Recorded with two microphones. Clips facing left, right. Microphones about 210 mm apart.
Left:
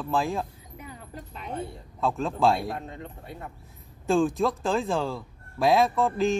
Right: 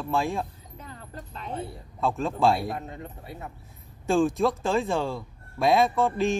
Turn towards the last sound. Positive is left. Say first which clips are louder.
# even
turn(degrees=0)  # may be behind; listen again after turning